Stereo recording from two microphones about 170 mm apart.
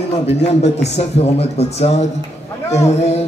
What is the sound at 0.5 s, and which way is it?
A man's voice, 40° left (ahead or behind).